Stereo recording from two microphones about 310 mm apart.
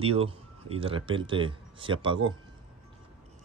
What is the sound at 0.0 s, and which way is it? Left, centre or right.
Speech, centre.